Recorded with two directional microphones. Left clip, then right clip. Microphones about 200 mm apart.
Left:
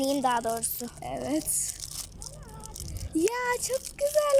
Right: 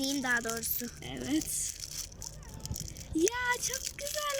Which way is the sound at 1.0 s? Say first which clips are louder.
Left 4 dB; 5° right (ahead or behind).